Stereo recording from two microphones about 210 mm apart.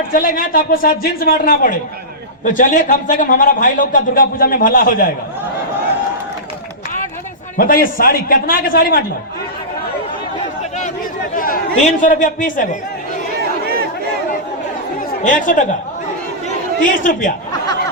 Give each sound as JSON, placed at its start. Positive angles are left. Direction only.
{"t": 0.1, "sound": "speech", "side_deg": 40}
{"t": 7.5, "sound": "speech", "side_deg": 45}
{"t": 11.3, "sound": "chatter", "side_deg": 40}
{"t": 11.9, "sound": "speech", "side_deg": 35}
{"t": 15.2, "sound": "speech", "side_deg": 40}
{"t": 17.0, "sound": "speech", "side_deg": 40}